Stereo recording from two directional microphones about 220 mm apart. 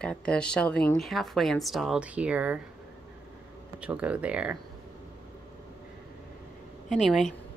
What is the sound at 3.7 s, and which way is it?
Speech, 5° right (ahead or behind).